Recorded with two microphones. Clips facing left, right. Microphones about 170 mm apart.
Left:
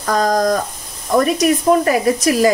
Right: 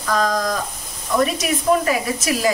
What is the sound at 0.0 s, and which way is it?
Speech, 45° left (ahead or behind).